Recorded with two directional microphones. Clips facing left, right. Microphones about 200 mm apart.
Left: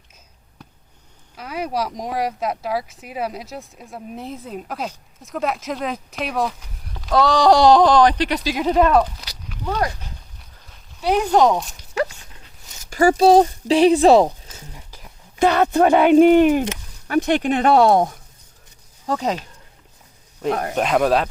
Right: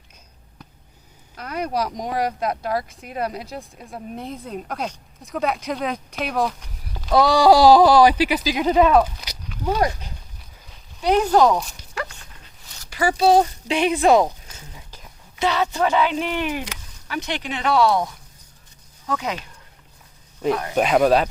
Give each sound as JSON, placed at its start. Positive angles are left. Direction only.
{"t": 1.4, "sound": "speech", "side_deg": 5}
{"t": 9.6, "sound": "speech", "side_deg": -15}
{"t": 10.7, "sound": "a sound", "side_deg": 5}
{"t": 12.9, "sound": "speech", "side_deg": 45}
{"t": 14.8, "sound": "whispering", "side_deg": 10}
{"t": 15.4, "sound": "speech", "side_deg": 50}
{"t": 19.0, "sound": "speech", "side_deg": 35}
{"t": 20.5, "sound": "speech", "side_deg": 50}
{"t": 20.7, "sound": "speech", "side_deg": 0}